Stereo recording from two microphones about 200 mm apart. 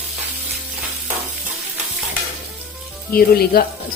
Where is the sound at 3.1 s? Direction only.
50° left (ahead or behind).